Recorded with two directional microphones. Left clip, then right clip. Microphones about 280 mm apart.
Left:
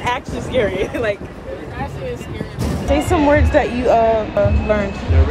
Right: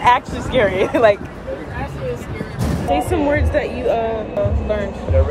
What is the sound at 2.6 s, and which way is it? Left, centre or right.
Speech, centre.